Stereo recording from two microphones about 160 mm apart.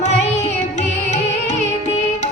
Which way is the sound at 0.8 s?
45° left (ahead or behind).